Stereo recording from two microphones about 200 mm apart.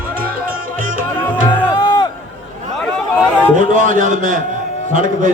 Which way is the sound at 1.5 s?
20° left (ahead or behind).